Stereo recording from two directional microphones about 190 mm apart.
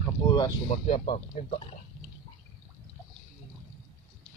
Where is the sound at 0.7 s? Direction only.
35° left (ahead or behind).